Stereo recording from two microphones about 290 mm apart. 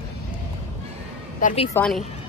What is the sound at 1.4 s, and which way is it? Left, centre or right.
Speech, left.